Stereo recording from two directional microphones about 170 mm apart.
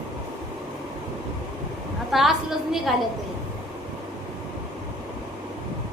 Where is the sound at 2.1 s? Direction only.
Centre (ahead or behind).